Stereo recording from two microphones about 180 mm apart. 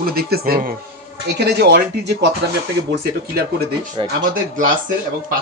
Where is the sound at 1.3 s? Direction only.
65° right (ahead or behind).